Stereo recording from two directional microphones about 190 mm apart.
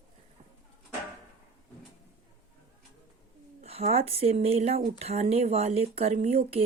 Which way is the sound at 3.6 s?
30° right (ahead or behind).